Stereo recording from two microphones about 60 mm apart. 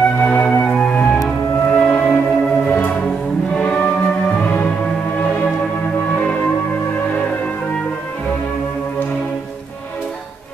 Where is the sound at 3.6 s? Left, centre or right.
Left.